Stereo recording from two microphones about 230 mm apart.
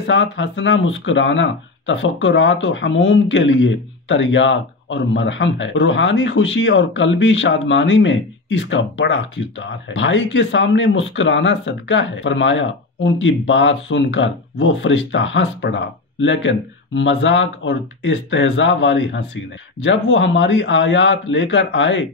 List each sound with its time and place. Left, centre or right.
0.0 s speech: left